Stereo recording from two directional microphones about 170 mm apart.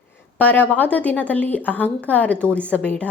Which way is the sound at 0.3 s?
10° left (ahead or behind).